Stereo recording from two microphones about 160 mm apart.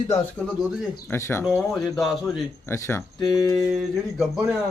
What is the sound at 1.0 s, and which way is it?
Speech, 15° left (ahead or behind).